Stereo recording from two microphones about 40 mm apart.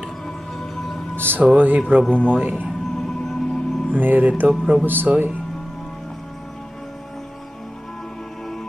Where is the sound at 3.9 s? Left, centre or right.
Right.